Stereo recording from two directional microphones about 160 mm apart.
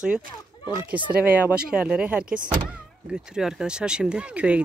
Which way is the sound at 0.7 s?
10° right (ahead or behind).